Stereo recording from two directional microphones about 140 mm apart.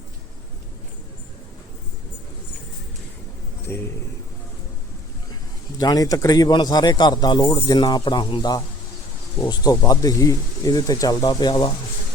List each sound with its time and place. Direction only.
3.7 s a man's voice: 15° left (ahead or behind)
5.7 s speech: 25° left (ahead or behind)